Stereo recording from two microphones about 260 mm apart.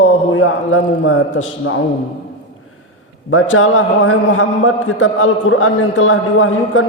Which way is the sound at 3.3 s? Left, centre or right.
Left.